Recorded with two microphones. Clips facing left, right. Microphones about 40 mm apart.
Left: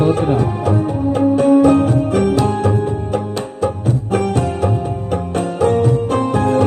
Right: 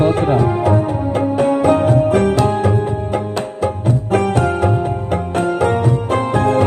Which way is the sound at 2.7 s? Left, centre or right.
Right.